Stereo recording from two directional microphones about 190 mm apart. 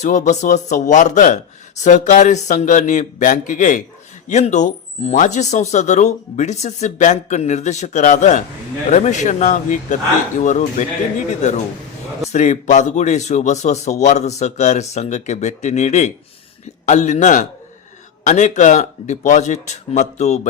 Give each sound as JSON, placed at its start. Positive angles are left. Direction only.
{"t": 0.0, "sound": "speech", "side_deg": 40}
{"t": 12.3, "sound": "speech", "side_deg": 40}